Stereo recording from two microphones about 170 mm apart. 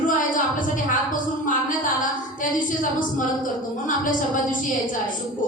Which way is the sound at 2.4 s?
50° left (ahead or behind).